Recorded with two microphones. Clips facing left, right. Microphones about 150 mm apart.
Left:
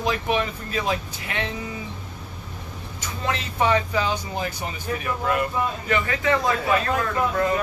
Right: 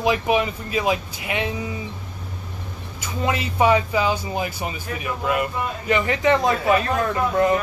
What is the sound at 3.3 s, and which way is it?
Speech, 10° right (ahead or behind).